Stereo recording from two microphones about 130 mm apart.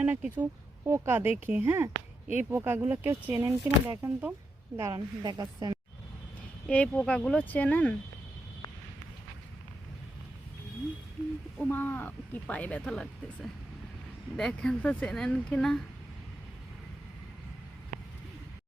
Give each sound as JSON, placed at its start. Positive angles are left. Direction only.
{"t": 0.0, "sound": "a woman's voice", "side_deg": -15}
{"t": 6.7, "sound": "speech", "side_deg": 5}
{"t": 11.7, "sound": "speech", "side_deg": 15}
{"t": 14.3, "sound": "speech", "side_deg": 5}